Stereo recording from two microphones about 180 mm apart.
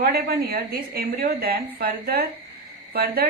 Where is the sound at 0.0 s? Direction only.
55° right (ahead or behind).